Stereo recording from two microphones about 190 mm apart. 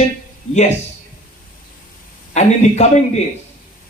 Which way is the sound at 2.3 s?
35° left (ahead or behind).